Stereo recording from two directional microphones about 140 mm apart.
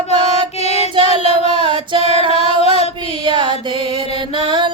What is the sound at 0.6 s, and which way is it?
Child singing, 50° left (ahead or behind).